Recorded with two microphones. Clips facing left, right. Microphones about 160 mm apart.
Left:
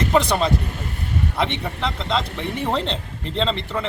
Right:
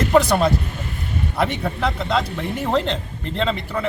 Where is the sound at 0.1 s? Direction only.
5° right (ahead or behind).